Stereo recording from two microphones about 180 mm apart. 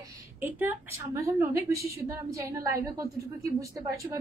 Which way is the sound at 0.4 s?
10° right (ahead or behind).